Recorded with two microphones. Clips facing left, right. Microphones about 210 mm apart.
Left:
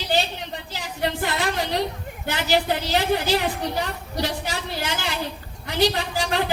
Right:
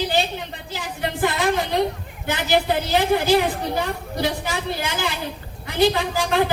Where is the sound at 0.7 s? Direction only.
50° right (ahead or behind).